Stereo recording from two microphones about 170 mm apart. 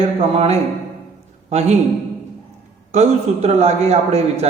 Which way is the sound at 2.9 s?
40° right (ahead or behind).